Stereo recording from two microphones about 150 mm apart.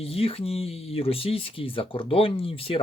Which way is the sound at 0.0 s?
40° left (ahead or behind).